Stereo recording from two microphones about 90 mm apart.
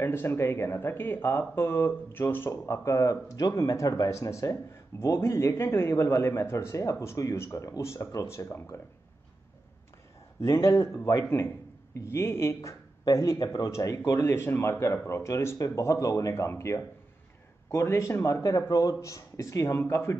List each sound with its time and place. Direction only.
0.0 s speech: 25° left (ahead or behind)
10.4 s speech: 35° left (ahead or behind)